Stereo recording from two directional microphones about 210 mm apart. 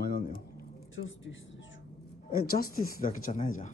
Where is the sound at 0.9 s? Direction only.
65° left (ahead or behind).